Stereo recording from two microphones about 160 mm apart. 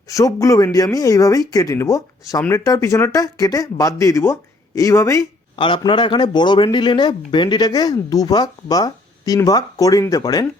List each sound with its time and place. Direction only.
0.1 s speech: 20° left (ahead or behind)
5.5 s speech: 30° left (ahead or behind)